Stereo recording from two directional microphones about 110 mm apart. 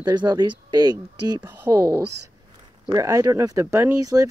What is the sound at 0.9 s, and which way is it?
Speech, 25° right (ahead or behind).